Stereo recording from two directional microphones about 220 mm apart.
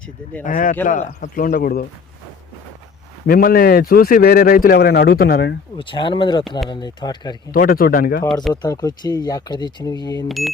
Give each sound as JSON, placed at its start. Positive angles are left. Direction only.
{"t": 0.4, "sound": "a man's voice", "side_deg": 35}
{"t": 3.2, "sound": "a man's voice", "side_deg": 40}
{"t": 5.7, "sound": "speech", "side_deg": 20}
{"t": 7.5, "sound": "a man's voice", "side_deg": 40}
{"t": 8.6, "sound": "speech", "side_deg": 15}
{"t": 10.2, "sound": "a sound", "side_deg": 0}